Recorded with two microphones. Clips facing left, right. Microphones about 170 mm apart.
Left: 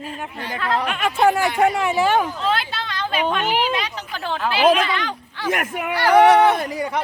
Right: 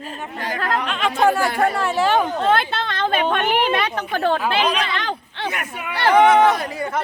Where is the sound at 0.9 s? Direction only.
10° left (ahead or behind).